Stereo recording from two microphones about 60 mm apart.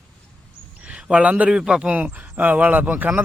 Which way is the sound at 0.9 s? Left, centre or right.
Centre.